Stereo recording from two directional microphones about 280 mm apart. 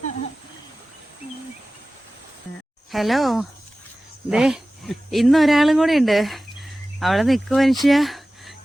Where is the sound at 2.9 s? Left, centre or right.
Centre.